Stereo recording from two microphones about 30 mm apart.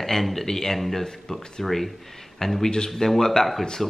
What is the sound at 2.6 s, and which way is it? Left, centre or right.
Speech, left.